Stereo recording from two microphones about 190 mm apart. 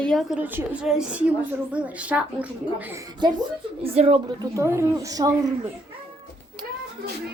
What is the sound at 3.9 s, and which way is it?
Speech, 30° right (ahead or behind).